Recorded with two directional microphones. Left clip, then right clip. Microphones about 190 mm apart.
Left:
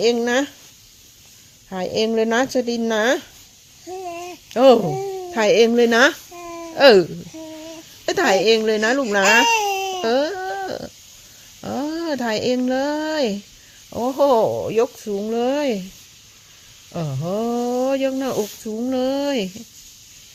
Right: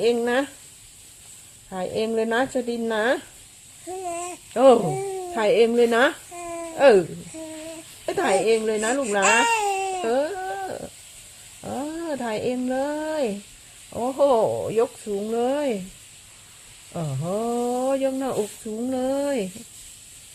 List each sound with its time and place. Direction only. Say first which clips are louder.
0.0 s speech: left 3 dB; 25° left (ahead or behind)
1.7 s speech: left 4 dB; 30° left (ahead or behind)
3.8 s babbling: even; centre (ahead or behind)
4.5 s speech: left 3 dB; 25° left (ahead or behind)
4.9 s speech: left 2 dB; centre (ahead or behind)
5.3 s speech: left 4 dB; 30° left (ahead or behind)
6.3 s babbling: even; centre (ahead or behind)
6.7 s speech: left 4 dB; 35° left (ahead or behind)
8.0 s a woman's voice: left 5 dB; 30° left (ahead or behind)
9.5 s baby cry: left 3 dB; 5° left (ahead or behind)
10.0 s a sound: left 4 dB; 35° left (ahead or behind)
11.6 s speech: left 5 dB; 35° left (ahead or behind)
16.9 s speech: left 3 dB; 30° left (ahead or behind)